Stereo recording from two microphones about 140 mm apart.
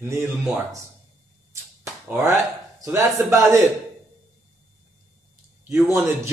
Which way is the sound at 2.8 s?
20° right (ahead or behind).